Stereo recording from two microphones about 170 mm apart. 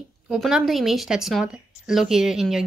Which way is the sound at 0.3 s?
5° right (ahead or behind).